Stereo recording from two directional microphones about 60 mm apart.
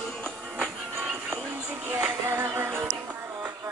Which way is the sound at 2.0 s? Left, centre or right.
Right.